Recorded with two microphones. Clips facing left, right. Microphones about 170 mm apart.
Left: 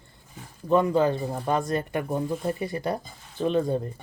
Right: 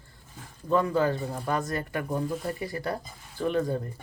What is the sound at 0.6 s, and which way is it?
Speech, 20° left (ahead or behind).